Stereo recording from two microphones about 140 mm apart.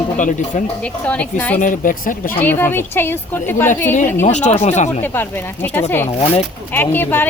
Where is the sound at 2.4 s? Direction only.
15° left (ahead or behind).